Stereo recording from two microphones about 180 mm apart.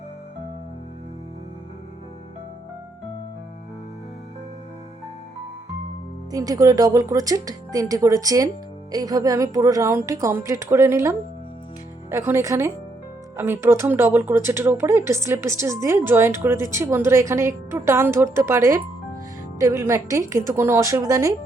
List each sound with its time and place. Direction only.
6.3 s speech: 20° right (ahead or behind)